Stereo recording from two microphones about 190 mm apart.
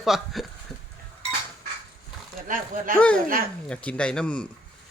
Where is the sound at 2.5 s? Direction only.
45° right (ahead or behind).